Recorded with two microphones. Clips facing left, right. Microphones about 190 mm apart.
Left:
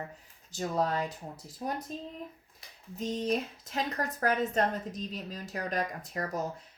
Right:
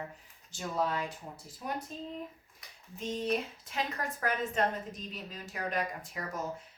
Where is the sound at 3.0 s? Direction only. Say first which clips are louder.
Left 2 dB; 40° left (ahead or behind).